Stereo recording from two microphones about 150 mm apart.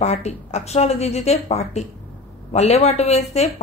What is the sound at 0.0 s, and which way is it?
A woman's voice, 45° left (ahead or behind).